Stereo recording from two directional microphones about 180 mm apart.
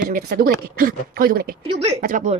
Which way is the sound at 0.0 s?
50° right (ahead or behind).